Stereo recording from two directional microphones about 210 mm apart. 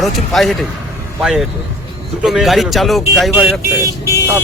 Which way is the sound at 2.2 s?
Centre (ahead or behind).